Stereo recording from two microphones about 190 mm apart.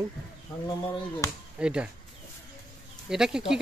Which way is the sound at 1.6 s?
5° right (ahead or behind).